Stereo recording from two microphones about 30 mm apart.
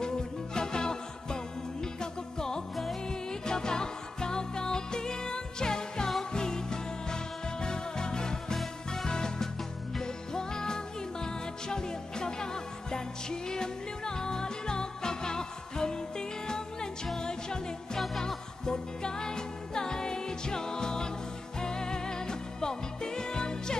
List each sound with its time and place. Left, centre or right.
0.6 s music: left
2.7 s music: centre
3.1 s music: left